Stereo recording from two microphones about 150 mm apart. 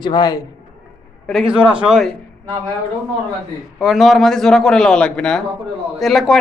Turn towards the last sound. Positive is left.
turn(degrees=0)  # may be behind; listen again after turning